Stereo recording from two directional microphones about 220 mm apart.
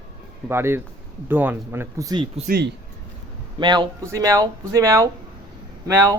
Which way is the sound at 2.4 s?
45° right (ahead or behind).